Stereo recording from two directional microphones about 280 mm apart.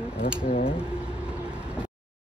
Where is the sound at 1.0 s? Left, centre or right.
Centre.